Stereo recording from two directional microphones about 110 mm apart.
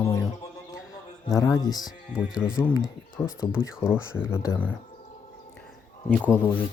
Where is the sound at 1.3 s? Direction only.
30° left (ahead or behind).